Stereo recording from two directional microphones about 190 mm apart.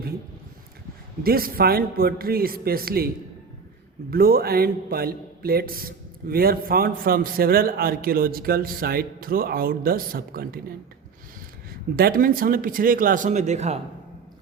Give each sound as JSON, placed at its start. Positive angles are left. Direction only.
{"t": 1.2, "sound": "speech", "side_deg": -50}
{"t": 4.1, "sound": "speech", "side_deg": -50}
{"t": 11.9, "sound": "speech", "side_deg": -50}